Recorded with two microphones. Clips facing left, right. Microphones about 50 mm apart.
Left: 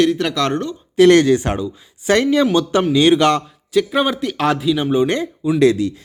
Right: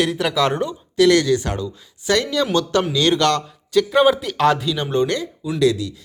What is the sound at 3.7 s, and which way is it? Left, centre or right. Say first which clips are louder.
A man's voice: right 2 dB; centre.